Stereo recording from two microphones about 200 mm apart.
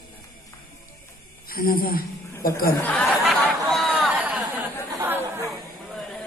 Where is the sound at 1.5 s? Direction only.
45° left (ahead or behind).